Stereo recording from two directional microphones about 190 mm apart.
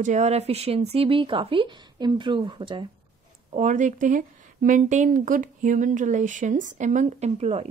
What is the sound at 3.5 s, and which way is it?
A woman's voice, 40° right (ahead or behind).